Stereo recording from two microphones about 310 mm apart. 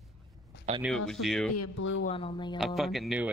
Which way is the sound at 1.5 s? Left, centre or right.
Left.